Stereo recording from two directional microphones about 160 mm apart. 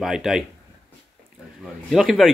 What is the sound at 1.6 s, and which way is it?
Speech, centre (ahead or behind).